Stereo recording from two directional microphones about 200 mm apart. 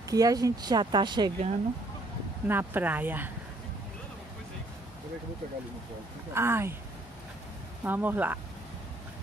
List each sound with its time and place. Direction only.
0.1 s speech: 15° right (ahead or behind)
2.4 s speech: 10° right (ahead or behind)
6.3 s speech: 10° right (ahead or behind)
7.8 s speech: 10° right (ahead or behind)